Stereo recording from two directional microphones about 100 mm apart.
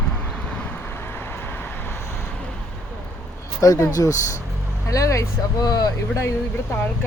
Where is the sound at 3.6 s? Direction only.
35° left (ahead or behind).